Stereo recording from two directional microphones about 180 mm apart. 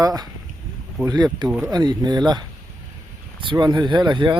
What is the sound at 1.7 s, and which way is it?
Speech, 25° right (ahead or behind).